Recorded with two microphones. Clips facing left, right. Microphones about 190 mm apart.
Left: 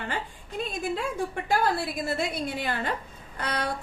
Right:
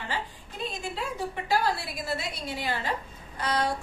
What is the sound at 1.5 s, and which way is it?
A woman's voice, 50° left (ahead or behind).